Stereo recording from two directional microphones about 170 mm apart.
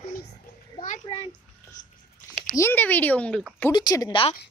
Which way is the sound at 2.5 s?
15° left (ahead or behind).